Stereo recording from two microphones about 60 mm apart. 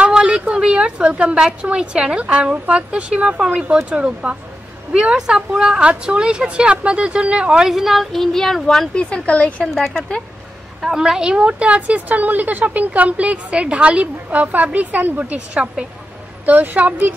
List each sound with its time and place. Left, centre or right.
0.0 s a sound: centre
1.4 s a woman's voice: centre
7.7 s speech: centre
8.9 s speech: centre
10.8 s a woman's voice: centre; by 17.1 s right